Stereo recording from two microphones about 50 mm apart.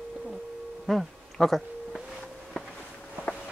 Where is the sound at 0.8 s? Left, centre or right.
Centre.